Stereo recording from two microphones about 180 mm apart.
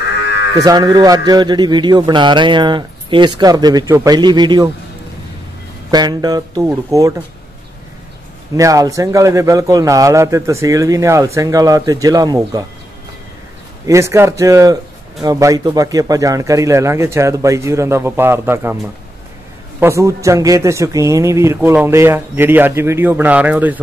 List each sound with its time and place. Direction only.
0.6 s a man's voice: 20° right (ahead or behind)
5.9 s a man's voice: 20° right (ahead or behind)
8.5 s a man's voice: 20° right (ahead or behind)
13.8 s a man's voice: 15° right (ahead or behind)
19.8 s a man's voice: 15° right (ahead or behind)